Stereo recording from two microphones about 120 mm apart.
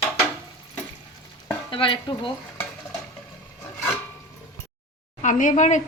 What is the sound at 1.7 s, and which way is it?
Speech, 45° left (ahead or behind).